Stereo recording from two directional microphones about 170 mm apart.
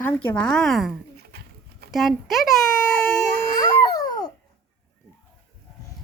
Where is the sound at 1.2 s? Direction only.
70° right (ahead or behind).